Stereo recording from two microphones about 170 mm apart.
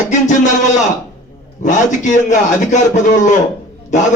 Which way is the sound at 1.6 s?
45° left (ahead or behind).